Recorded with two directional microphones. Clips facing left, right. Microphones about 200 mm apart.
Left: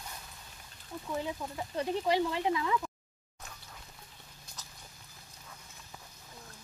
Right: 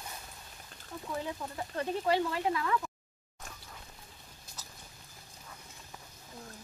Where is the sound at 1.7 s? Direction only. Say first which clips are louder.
Even; 15° left (ahead or behind).